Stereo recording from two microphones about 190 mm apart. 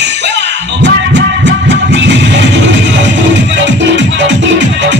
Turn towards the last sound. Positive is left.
turn(degrees=-75)  # may be behind; listen again after turning